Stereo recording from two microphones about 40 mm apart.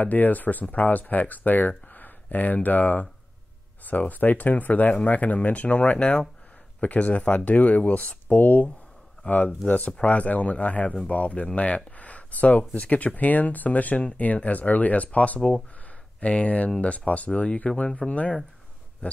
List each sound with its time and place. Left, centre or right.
0.0 s speech: left
6.8 s speech: left
9.2 s speech: left
17.3 s speech: left